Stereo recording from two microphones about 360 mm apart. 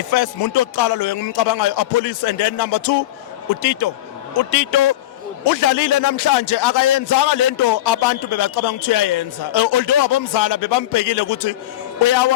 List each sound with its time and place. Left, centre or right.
0.1 s a man's voice: left